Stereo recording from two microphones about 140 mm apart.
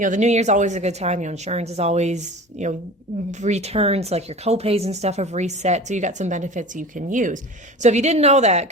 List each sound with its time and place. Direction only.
0.0 s speech: 60° right (ahead or behind)
7.8 s speech: 55° right (ahead or behind)